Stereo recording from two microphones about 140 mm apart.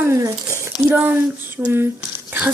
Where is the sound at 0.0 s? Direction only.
20° right (ahead or behind).